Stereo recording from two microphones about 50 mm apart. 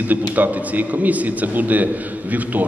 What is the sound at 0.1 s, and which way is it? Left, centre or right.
A man's voice, right.